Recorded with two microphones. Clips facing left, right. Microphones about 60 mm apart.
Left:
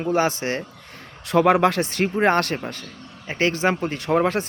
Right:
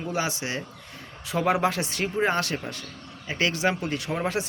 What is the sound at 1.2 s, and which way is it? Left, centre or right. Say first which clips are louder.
Speech: left 7 dB; left.